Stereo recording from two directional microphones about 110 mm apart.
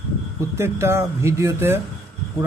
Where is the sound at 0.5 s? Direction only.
25° right (ahead or behind).